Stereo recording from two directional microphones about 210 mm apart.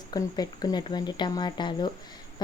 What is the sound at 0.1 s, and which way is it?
Speech, 20° left (ahead or behind).